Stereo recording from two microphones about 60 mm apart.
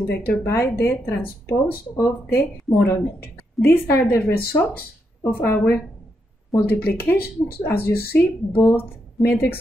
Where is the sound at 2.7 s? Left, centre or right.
Left.